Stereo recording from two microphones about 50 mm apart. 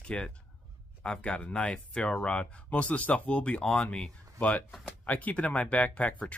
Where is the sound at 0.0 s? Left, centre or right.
Left.